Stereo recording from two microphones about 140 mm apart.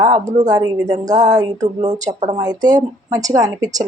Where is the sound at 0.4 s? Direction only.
25° right (ahead or behind).